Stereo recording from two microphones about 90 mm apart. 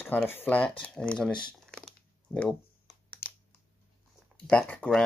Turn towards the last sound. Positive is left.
turn(degrees=15)  # may be behind; listen again after turning